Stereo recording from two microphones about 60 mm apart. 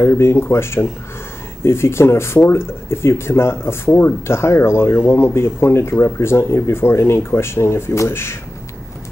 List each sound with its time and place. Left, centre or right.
0.0 s speech: left